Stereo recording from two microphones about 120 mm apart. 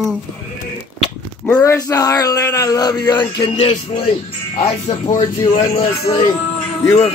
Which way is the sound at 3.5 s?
55° left (ahead or behind).